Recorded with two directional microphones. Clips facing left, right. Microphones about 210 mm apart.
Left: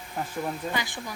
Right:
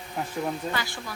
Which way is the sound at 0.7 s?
15° left (ahead or behind).